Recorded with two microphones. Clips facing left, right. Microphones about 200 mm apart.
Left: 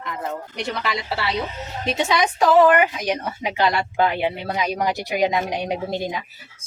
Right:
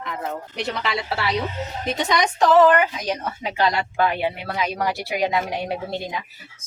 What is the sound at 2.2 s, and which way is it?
Speech, 10° left (ahead or behind).